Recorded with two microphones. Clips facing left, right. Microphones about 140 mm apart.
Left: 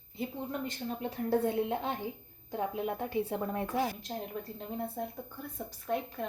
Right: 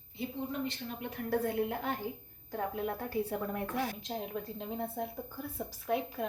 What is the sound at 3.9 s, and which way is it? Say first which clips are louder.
A woman's voice: right 1 dB; centre (ahead or behind).